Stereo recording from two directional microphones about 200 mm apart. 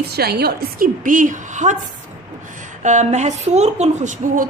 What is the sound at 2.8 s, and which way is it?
A woman's voice, 35° right (ahead or behind).